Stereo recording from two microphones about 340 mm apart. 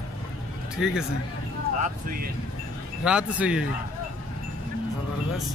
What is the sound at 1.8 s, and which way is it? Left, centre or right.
Speech, right.